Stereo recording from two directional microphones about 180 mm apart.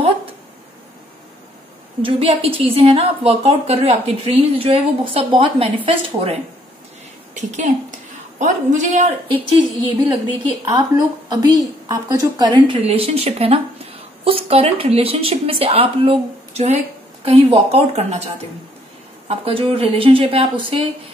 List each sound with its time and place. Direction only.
2.0 s a woman's voice: 30° right (ahead or behind)
7.3 s a woman's voice: 45° right (ahead or behind)
10.7 s a woman's voice: 20° right (ahead or behind)